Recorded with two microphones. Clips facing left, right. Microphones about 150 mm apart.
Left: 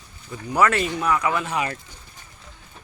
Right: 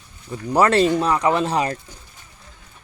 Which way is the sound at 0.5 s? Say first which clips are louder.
Right 5 dB; 35° right (ahead or behind).